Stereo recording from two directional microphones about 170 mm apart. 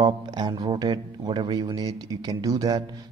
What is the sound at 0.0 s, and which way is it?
Speech, 25° right (ahead or behind).